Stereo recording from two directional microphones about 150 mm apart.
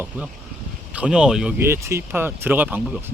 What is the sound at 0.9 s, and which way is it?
Speech, 5° right (ahead or behind).